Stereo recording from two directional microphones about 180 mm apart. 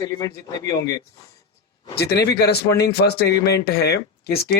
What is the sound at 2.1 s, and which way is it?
Speech, 65° left (ahead or behind).